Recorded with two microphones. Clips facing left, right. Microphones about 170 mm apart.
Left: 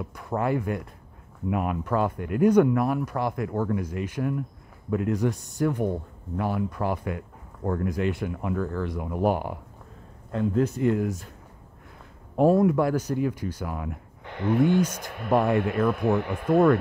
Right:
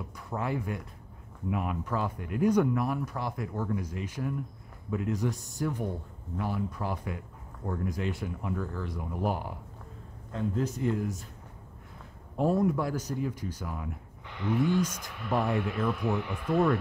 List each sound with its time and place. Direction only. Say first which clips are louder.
0.1 s speech: left 7 dB; 60° left (ahead or behind)
12.4 s speech: left 7 dB; 75° left (ahead or behind); by 16.7 s 55° left (ahead or behind)